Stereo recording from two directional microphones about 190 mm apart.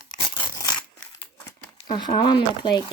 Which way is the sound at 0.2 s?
25° left (ahead or behind).